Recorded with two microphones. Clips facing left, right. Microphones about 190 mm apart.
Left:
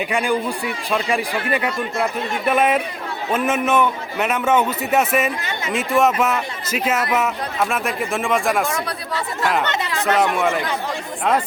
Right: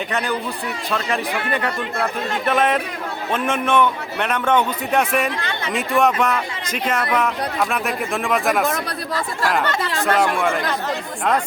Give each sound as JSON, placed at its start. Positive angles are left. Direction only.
{"t": 0.1, "sound": "a man's voice", "side_deg": 10}
{"t": 9.6, "sound": "speech", "side_deg": 25}
{"t": 10.2, "sound": "a man's voice", "side_deg": 0}